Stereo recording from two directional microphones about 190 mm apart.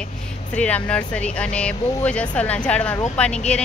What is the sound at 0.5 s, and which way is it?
Speech, 5° left (ahead or behind).